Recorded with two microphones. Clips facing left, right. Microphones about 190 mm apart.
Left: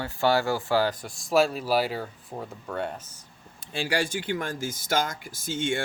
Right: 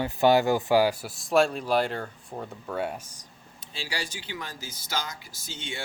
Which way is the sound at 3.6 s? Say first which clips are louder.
Left 8 dB; 55° left (ahead or behind).